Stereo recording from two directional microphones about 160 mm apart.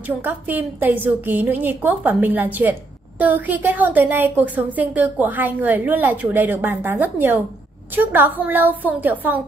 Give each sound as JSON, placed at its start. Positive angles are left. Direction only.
{"t": 0.2, "sound": "a woman's voice", "side_deg": -10}